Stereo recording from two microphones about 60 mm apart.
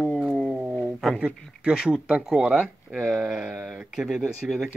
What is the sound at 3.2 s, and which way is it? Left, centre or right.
Speech, centre.